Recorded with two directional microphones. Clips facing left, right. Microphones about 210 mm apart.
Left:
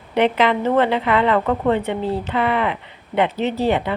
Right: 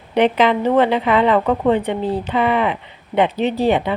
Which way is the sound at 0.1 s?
15° right (ahead or behind).